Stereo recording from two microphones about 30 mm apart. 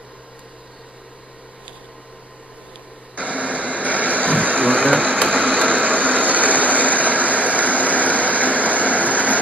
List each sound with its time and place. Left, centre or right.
3.2 s a sound: right
4.3 s vehicle: right
5.3 s a sound: right
5.7 s vehicle: right
7.2 s train: right
7.7 s vehicle: right